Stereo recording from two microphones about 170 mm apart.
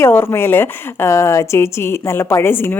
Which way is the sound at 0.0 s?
15° left (ahead or behind).